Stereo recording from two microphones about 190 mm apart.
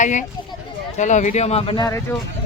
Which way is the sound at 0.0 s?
40° left (ahead or behind).